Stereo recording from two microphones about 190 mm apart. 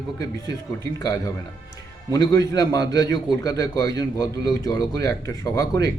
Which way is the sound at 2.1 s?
20° left (ahead or behind).